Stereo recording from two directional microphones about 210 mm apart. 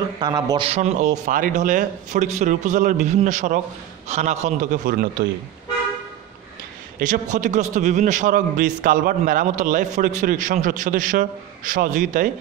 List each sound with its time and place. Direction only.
0.2 s speech: 20° right (ahead or behind)
0.7 s a man's voice: 30° right (ahead or behind)
7.0 s a man's voice: 35° right (ahead or behind)